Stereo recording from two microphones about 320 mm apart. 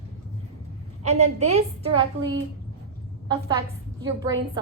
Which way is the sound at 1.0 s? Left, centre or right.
Right.